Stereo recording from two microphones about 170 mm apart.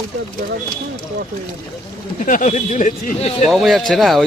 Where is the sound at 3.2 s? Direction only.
35° left (ahead or behind).